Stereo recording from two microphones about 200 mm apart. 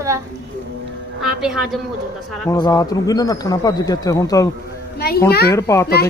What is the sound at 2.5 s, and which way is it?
Speech, 15° left (ahead or behind).